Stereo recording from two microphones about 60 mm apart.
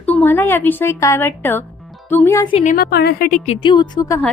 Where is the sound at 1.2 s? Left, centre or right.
Left.